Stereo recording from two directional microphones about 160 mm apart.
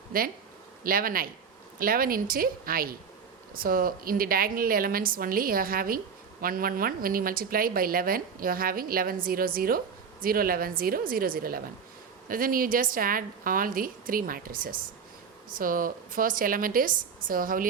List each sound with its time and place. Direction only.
0.1 s speech: 65° right (ahead or behind)